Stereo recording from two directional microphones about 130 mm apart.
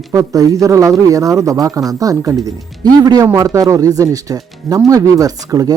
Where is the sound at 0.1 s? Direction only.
25° right (ahead or behind).